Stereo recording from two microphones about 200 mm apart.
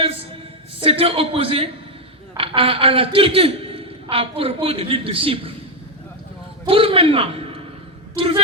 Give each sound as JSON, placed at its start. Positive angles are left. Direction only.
{"t": 0.8, "sound": "a man's voice", "side_deg": -30}
{"t": 6.7, "sound": "a man's voice", "side_deg": -25}